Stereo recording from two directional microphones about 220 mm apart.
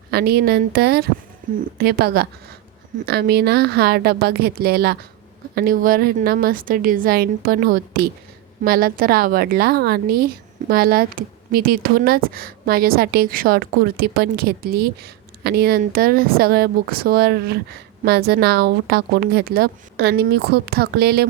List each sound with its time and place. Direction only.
0.1 s a woman's voice: 45° right (ahead or behind)